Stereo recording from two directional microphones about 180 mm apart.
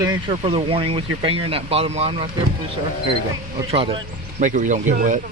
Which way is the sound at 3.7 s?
30° right (ahead or behind).